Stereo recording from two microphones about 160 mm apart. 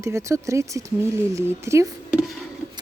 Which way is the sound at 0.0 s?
20° right (ahead or behind).